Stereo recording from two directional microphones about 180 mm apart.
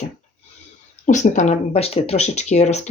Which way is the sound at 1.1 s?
40° left (ahead or behind).